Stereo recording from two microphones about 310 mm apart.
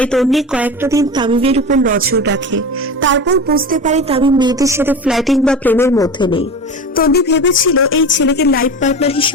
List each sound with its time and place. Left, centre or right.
0.0 s speech: centre
6.9 s speech: left